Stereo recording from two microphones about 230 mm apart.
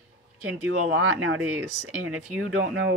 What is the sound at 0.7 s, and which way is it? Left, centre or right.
Speech, right.